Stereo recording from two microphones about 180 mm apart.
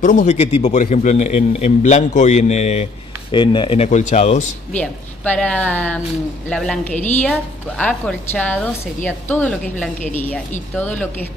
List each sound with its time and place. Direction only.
0.0 s a man's voice: 45° left (ahead or behind)
3.3 s a man's voice: 25° left (ahead or behind)
4.7 s a woman's voice: 10° left (ahead or behind)